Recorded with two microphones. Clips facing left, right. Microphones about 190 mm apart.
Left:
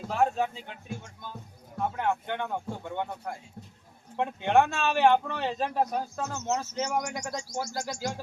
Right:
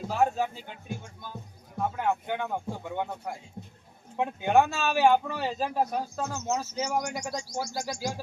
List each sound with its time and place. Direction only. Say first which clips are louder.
0.1 s speech: even; 5° right (ahead or behind)
2.0 s speech: right 1 dB; 5° right (ahead or behind)
3.6 s a sound: right 3 dB; 20° right (ahead or behind)
4.2 s speech: even; 5° right (ahead or behind)